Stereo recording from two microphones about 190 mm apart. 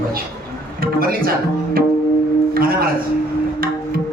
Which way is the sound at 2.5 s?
50° right (ahead or behind).